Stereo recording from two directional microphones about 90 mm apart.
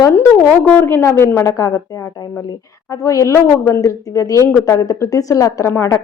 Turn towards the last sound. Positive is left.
turn(degrees=30)  # may be behind; listen again after turning